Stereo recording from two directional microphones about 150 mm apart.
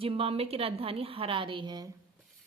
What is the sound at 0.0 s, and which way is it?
A woman's voice, 40° right (ahead or behind).